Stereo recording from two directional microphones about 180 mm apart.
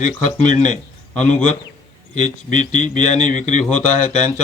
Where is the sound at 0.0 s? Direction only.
45° left (ahead or behind).